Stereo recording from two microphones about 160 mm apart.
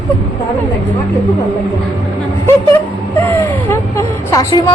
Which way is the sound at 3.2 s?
15° left (ahead or behind).